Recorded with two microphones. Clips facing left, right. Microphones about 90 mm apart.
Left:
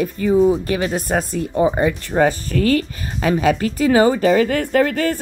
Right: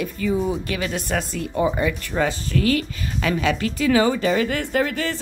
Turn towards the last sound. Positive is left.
turn(degrees=45)  # may be behind; listen again after turning